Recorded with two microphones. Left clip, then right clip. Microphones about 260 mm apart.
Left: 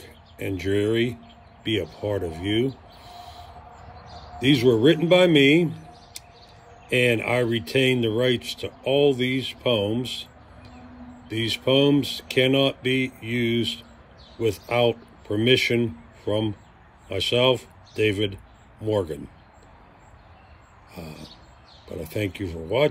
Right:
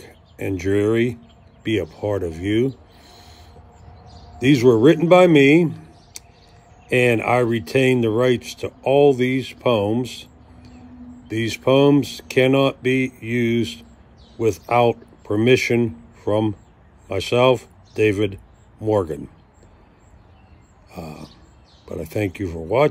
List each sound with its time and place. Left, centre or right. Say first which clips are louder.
0.0 s speech: right 4 dB; centre
4.6 s speech: right 5 dB; centre
6.9 s speech: right 4 dB; centre
11.3 s speech: right 4 dB; centre
14.7 s speech: right 5 dB; centre
20.9 s speech: right 5 dB; centre